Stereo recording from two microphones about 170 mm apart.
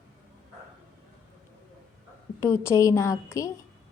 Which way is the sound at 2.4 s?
15° left (ahead or behind).